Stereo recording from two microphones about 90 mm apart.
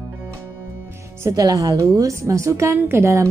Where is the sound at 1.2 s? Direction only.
40° right (ahead or behind).